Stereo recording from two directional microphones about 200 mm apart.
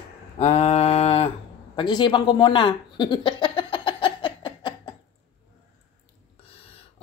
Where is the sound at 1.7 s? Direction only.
20° left (ahead or behind).